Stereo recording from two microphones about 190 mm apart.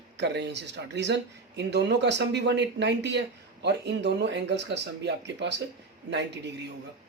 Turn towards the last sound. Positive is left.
turn(degrees=-65)  # may be behind; listen again after turning